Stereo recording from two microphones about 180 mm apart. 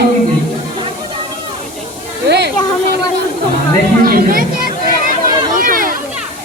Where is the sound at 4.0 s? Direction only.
55° right (ahead or behind).